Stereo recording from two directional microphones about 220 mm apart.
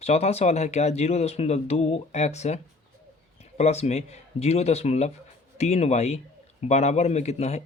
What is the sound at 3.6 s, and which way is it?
Speech, 30° left (ahead or behind).